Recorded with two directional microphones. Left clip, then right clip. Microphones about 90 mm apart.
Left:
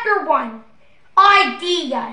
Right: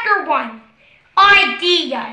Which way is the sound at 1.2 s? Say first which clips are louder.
Right 1 dB; 20° left (ahead or behind).